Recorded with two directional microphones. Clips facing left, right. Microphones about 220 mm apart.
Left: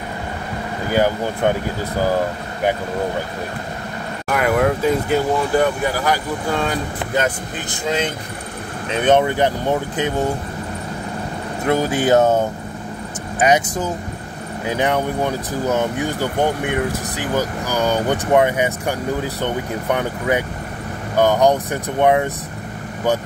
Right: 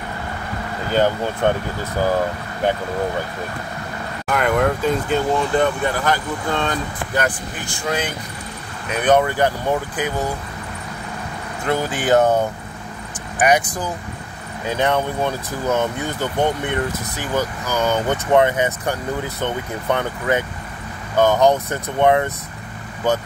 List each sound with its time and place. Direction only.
0.8 s speech: 10° left (ahead or behind)
4.3 s speech: 5° left (ahead or behind)
7.2 s speech: 20° left (ahead or behind)
11.6 s speech: 15° left (ahead or behind)
13.4 s speech: 25° left (ahead or behind)